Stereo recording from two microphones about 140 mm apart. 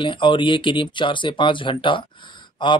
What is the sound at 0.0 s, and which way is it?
Speech, 35° left (ahead or behind).